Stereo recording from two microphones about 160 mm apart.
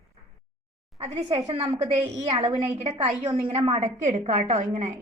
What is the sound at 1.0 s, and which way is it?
A woman's voice, 45° right (ahead or behind).